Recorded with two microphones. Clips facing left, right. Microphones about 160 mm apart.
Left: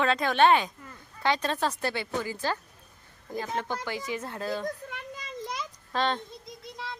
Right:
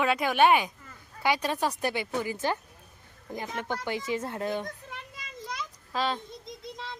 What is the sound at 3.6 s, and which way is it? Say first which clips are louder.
Speech: right 1 dB; 20° right (ahead or behind).